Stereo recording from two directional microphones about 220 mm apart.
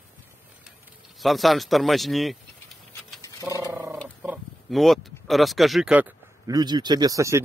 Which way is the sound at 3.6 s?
15° right (ahead or behind).